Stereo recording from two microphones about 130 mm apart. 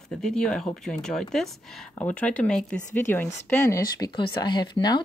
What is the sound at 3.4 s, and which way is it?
Speech, 20° left (ahead or behind).